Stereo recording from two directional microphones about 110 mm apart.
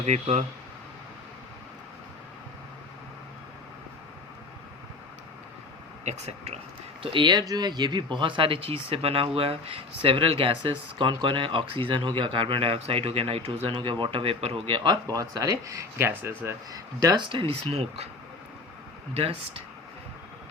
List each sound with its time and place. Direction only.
0.0 s speech: 80° right
6.1 s speech: 85° right
7.0 s speech: 50° right (ahead or behind)
14.8 s speech: 35° right (ahead or behind)
16.0 s speech: 20° right (ahead or behind)
16.7 s speech: 35° right (ahead or behind); by 18.1 s 65° right (ahead or behind)
19.1 s speech: 60° right (ahead or behind)